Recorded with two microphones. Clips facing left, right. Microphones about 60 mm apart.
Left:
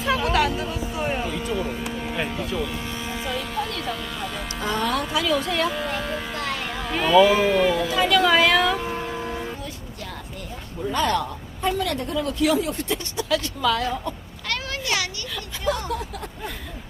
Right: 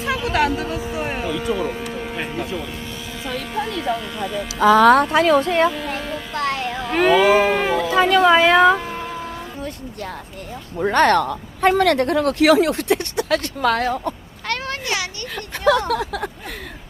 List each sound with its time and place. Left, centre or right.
0.3 s chatter: right
0.7 s a sound: right
2.0 s a sound: centre
3.7 s speech: centre
4.6 s speech: right
5.1 s speech: right
6.0 s music: centre
6.9 s speech: right
7.8 s speech: right
10.8 s speech: right
15.4 s a sound: right
15.9 s a sound: right